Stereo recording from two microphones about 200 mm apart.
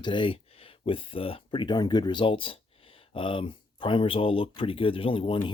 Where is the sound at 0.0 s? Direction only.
25° left (ahead or behind).